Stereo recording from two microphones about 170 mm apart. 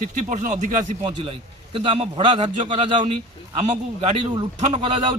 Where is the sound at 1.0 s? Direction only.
30° right (ahead or behind).